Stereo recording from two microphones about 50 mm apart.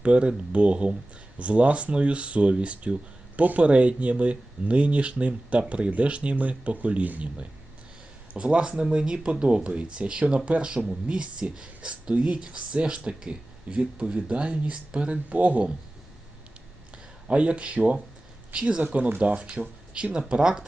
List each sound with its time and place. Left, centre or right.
0.0 s speech: right
8.3 s speech: right
16.9 s speech: right